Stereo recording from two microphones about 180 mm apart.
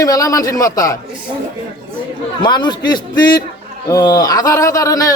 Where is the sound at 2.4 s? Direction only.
25° left (ahead or behind).